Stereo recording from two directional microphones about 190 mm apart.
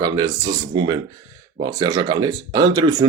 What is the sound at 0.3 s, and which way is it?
Speech, 20° right (ahead or behind).